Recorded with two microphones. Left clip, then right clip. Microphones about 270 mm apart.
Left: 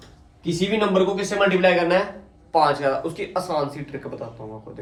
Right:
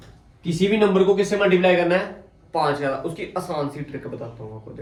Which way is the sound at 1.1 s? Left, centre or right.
Centre.